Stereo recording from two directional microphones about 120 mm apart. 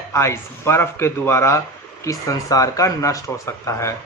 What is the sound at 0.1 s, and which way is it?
Speech, 20° left (ahead or behind).